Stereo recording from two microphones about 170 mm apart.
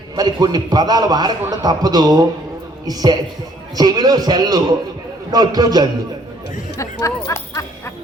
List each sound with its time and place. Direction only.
0.2 s a man's voice: 25° right (ahead or behind)
6.7 s speech: 20° left (ahead or behind)